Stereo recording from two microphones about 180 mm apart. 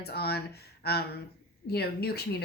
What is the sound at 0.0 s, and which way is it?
Speech, 60° left (ahead or behind).